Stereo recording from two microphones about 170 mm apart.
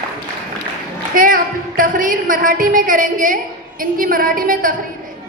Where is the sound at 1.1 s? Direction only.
55° right (ahead or behind).